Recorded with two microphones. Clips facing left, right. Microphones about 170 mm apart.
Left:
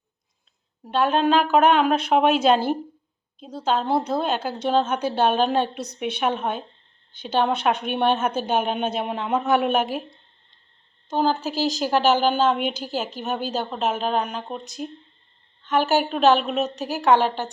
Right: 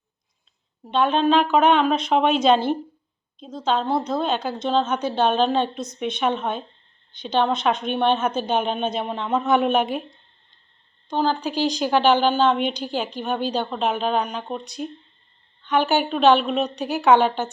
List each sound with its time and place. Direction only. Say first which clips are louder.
0.9 s a woman's voice: right 1 dB; 5° left (ahead or behind)
11.1 s a woman's voice: even; 5° left (ahead or behind)